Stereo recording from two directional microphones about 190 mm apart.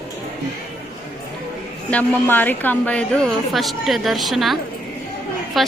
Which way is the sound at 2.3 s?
10° left (ahead or behind).